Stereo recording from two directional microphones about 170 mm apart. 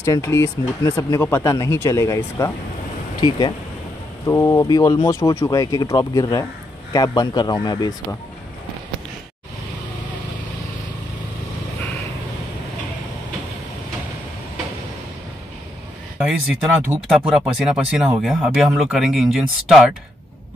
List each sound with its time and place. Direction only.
0.0 s speech: 15° left (ahead or behind)
16.3 s speech: 10° right (ahead or behind)